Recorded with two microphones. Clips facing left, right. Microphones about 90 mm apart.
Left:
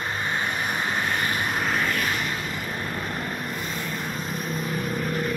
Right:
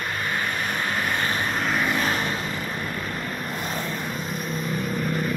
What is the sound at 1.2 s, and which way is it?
Vehicle, 25° right (ahead or behind).